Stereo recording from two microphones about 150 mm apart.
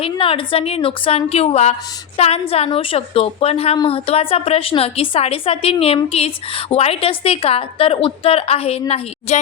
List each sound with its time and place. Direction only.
0.0 s a woman's voice: 35° left (ahead or behind)